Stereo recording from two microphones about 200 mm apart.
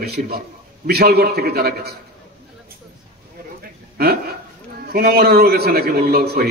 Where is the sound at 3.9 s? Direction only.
50° right (ahead or behind).